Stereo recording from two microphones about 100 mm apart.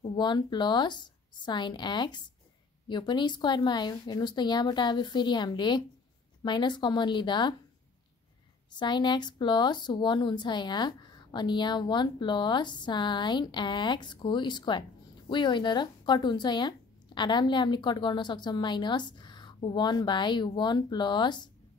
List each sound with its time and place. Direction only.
0.1 s a woman's voice: 50° left (ahead or behind)
8.7 s a woman's voice: 50° left (ahead or behind)